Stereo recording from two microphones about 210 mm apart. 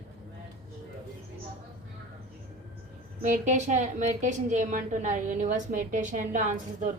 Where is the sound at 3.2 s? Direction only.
35° right (ahead or behind).